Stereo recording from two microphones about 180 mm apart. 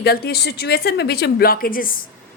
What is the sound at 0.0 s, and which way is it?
A woman's voice, 60° left (ahead or behind).